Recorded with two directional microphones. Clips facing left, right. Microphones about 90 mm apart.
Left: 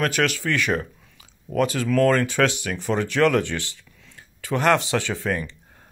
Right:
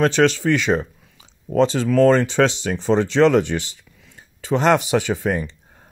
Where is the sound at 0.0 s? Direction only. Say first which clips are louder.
Right 6 dB; 25° right (ahead or behind).